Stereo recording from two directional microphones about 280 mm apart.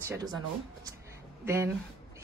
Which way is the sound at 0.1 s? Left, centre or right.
Centre.